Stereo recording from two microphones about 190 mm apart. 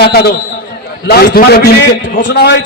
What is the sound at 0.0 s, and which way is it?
A man's voice, 55° left (ahead or behind).